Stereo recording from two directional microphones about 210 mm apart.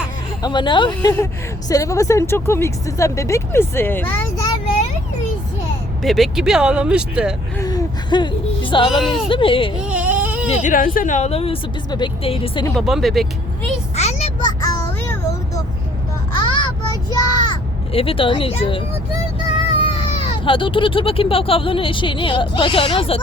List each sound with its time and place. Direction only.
0.4 s speech: 20° left (ahead or behind)
6.0 s speech: centre (ahead or behind)
7.6 s whimper: 15° left (ahead or behind)
9.3 s speech: 25° left (ahead or behind)
9.8 s baby cry: 5° right (ahead or behind)
10.5 s speech: 40° left (ahead or behind)
12.7 s speech: centre (ahead or behind)
13.9 s a sound: 30° left (ahead or behind)
14.4 s music: 15° left (ahead or behind)
16.3 s a sound: 20° left (ahead or behind)
19.8 s speech: 25° left (ahead or behind)